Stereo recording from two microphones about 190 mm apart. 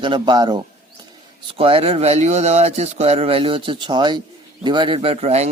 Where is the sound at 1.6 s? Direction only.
30° right (ahead or behind).